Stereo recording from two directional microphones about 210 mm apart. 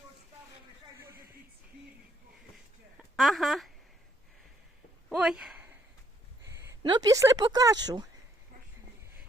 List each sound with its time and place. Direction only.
0.9 s a sound: 10° right (ahead or behind)
3.0 s speech: centre (ahead or behind)
5.0 s speech: 5° right (ahead or behind); by 8.0 s 20° right (ahead or behind)